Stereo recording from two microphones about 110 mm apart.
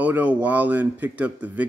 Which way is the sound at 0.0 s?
15° right (ahead or behind).